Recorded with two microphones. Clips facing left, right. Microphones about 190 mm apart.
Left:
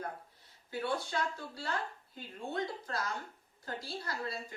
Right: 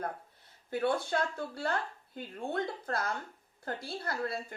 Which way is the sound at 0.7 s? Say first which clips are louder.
Right 5 dB; 55° right (ahead or behind).